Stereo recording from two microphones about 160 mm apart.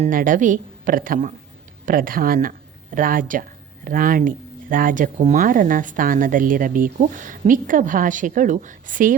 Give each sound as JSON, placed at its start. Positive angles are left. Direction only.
{"t": 0.1, "sound": "speech", "side_deg": -55}